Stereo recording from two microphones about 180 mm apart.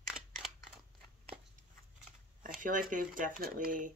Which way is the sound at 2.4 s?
50° right (ahead or behind).